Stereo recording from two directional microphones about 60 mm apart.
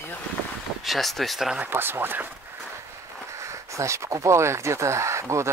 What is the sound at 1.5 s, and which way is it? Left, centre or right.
Speech, right.